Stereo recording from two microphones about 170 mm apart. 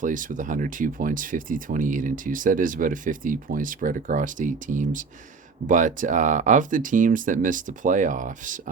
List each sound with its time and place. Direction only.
0.0 s speech: 50° right (ahead or behind)